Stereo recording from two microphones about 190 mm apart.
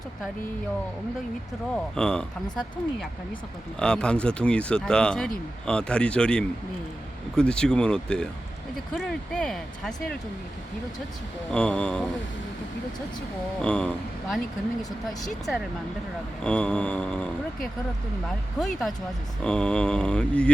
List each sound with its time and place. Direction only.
1.7 s speech: 5° left (ahead or behind)
11.5 s speech: 5° left (ahead or behind)
13.6 s speech: 5° left (ahead or behind)
16.4 s speech: 5° left (ahead or behind)